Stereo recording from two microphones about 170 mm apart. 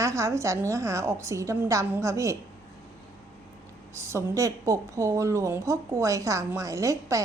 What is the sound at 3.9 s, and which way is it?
A woman's voice, 15° right (ahead or behind).